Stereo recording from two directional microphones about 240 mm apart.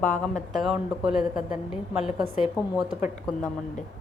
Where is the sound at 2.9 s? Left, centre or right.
Left.